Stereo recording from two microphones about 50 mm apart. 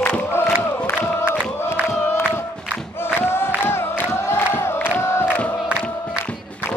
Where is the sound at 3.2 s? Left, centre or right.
Left.